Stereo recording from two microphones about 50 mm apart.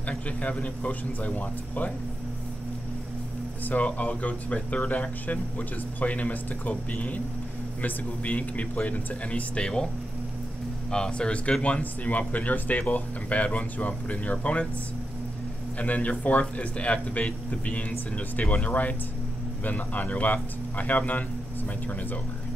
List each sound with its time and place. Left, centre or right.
0.4 s speech: left
3.6 s speech: left
10.9 s speech: centre
15.8 s speech: left